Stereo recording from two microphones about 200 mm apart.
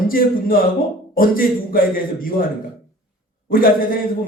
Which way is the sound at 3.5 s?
45° left (ahead or behind).